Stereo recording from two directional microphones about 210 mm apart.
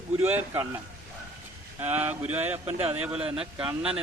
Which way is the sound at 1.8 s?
10° right (ahead or behind).